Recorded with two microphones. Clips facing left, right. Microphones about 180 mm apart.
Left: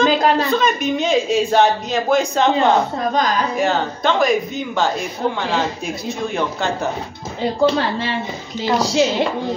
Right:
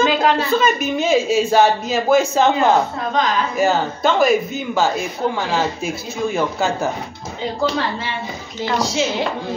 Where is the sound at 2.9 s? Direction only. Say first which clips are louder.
Left 1 dB; 40° left (ahead or behind).